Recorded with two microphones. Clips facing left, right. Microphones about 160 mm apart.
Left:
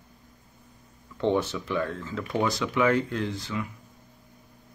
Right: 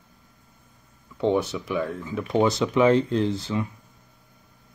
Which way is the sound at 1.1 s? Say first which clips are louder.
Right 2 dB; 15° right (ahead or behind).